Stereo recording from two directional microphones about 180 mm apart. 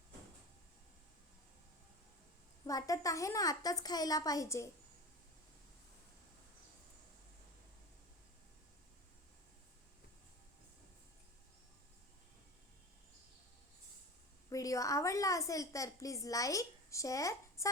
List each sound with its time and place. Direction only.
2.6 s a woman's voice: 20° left (ahead or behind)
14.5 s a woman's voice: 20° left (ahead or behind)